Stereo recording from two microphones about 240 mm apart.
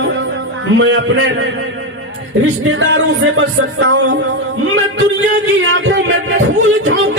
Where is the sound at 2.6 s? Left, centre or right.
Right.